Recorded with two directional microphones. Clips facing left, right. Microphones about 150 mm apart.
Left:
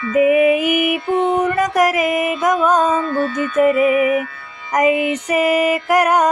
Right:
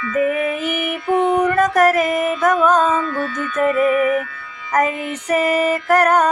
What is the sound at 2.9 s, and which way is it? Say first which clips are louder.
Music: left 2 dB; 30° left (ahead or behind).